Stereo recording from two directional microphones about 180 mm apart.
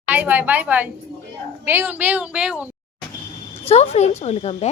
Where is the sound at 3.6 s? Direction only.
35° left (ahead or behind).